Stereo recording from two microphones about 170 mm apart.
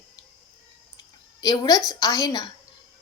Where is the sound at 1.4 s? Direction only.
20° left (ahead or behind).